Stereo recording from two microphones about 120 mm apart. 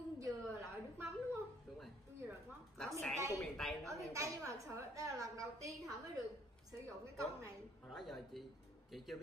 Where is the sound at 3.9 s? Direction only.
25° right (ahead or behind).